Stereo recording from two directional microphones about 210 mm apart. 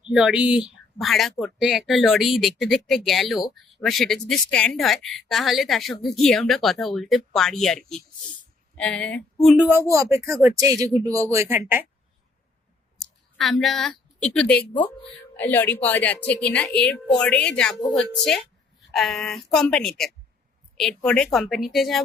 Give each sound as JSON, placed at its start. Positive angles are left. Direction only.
{"t": 0.1, "sound": "speech", "side_deg": -5}
{"t": 13.0, "sound": "a woman's voice", "side_deg": 0}